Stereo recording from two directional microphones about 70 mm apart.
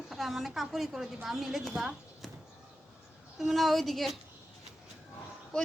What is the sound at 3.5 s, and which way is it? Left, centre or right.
Speech, centre.